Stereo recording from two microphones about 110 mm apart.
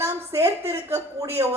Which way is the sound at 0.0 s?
25° right (ahead or behind).